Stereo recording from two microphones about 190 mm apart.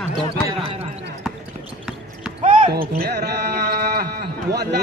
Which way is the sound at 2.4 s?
40° right (ahead or behind).